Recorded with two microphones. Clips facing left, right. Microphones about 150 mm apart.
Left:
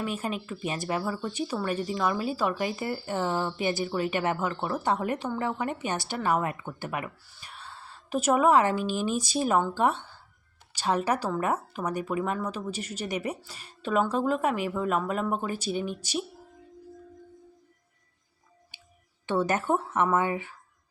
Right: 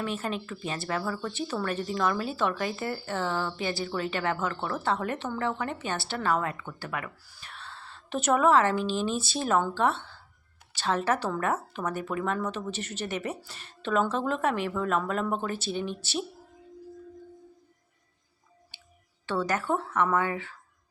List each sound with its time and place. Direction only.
0.0 s a woman's voice: 10° left (ahead or behind)
19.2 s speech: 20° left (ahead or behind)